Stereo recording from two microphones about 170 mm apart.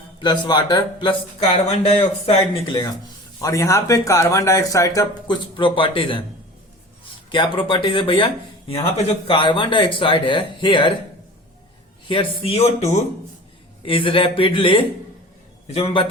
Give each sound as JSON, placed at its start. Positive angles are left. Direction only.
{"t": 0.2, "sound": "a man's voice", "side_deg": 25}
{"t": 3.4, "sound": "speech", "side_deg": 20}
{"t": 7.3, "sound": "speech", "side_deg": 30}
{"t": 12.0, "sound": "a man's voice", "side_deg": 30}